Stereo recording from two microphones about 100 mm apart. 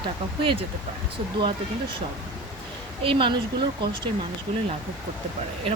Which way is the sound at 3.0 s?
60° right (ahead or behind).